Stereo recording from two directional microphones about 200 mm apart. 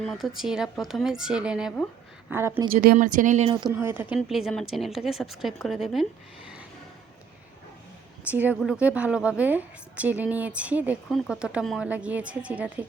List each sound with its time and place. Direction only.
0.0 s a woman's voice: centre (ahead or behind)
2.7 s speech: 45° right (ahead or behind); by 3.8 s 25° right (ahead or behind)
3.8 s a woman's voice: 10° right (ahead or behind)
8.3 s a woman's voice: 10° right (ahead or behind)